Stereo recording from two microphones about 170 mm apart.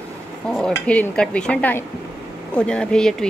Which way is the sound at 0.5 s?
5° left (ahead or behind).